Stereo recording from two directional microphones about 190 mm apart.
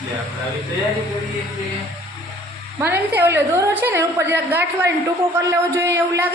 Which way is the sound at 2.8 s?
10° right (ahead or behind).